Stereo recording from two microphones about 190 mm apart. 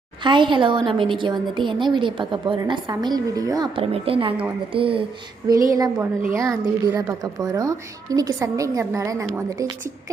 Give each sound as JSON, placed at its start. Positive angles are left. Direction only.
{"t": 0.3, "sound": "a woman's voice", "side_deg": -25}